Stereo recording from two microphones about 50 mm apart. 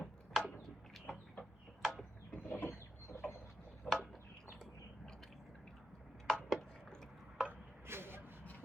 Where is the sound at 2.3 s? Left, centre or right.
Left.